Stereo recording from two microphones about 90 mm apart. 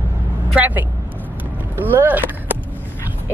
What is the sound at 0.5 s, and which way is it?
Speech, 20° right (ahead or behind).